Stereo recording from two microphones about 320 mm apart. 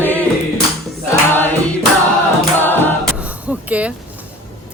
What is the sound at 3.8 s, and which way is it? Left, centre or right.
Speech, centre.